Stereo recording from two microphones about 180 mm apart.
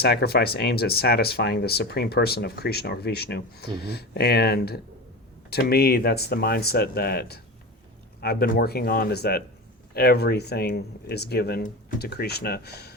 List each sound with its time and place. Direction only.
0.0 s speech: 60° left (ahead or behind)